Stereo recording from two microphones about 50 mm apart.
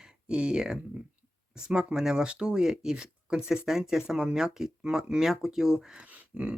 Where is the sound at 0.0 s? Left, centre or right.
Centre.